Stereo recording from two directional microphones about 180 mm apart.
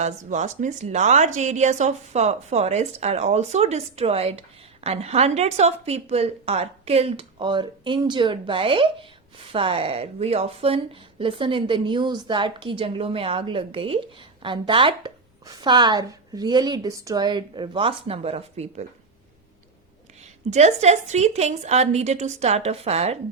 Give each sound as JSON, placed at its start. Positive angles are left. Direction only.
{"t": 0.0, "sound": "a woman's voice", "side_deg": -40}
{"t": 20.2, "sound": "a woman's voice", "side_deg": -40}